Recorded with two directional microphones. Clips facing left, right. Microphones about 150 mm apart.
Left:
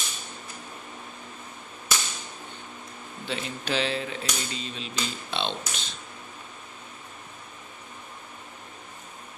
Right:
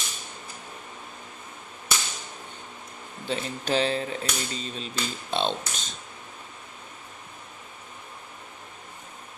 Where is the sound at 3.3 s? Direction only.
40° right (ahead or behind).